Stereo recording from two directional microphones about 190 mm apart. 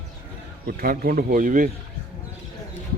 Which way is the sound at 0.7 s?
50° right (ahead or behind).